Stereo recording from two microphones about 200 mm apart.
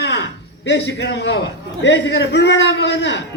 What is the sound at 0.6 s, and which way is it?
A man's voice, 55° left (ahead or behind).